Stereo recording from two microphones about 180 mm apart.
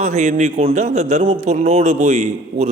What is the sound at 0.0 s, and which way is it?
A man's voice, 40° right (ahead or behind).